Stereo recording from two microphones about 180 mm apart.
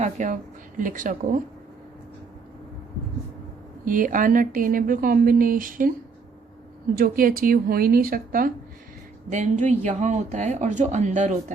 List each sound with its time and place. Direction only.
0.0 s speech: 45° right (ahead or behind)
3.8 s speech: 50° right (ahead or behind)
6.9 s speech: 50° right (ahead or behind)